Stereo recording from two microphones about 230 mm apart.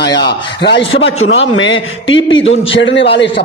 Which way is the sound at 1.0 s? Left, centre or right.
Left.